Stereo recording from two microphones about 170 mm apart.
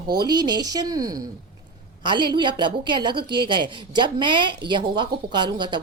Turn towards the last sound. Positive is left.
turn(degrees=-30)  # may be behind; listen again after turning